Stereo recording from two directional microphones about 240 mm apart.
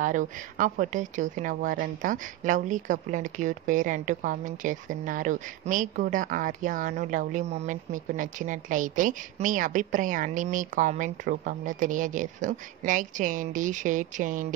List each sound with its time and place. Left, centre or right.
0.0 s a woman's voice: right